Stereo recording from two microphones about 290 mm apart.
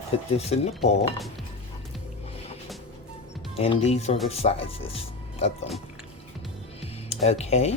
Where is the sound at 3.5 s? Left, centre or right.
Left.